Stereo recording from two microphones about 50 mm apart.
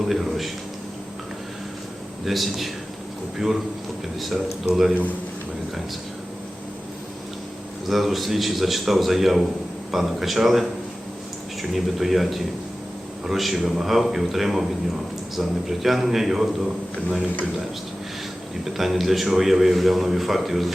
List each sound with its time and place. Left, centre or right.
0.1 s a sound: centre
2.2 s a man's voice: centre
4.7 s a man's voice: centre
7.9 s a man's voice: centre
11.7 s a man's voice: centre
18.6 s a man's voice: centre